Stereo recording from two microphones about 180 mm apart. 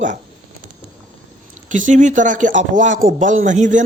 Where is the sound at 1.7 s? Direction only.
45° right (ahead or behind).